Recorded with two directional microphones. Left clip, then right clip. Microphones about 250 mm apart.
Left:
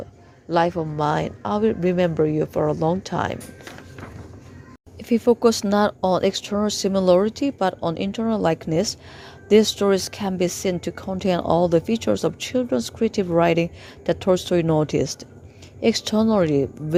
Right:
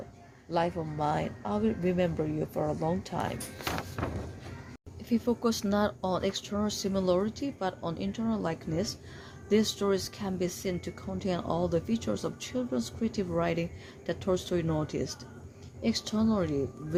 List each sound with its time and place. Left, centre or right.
0.5 s a woman's voice: left
4.9 s a woman's voice: left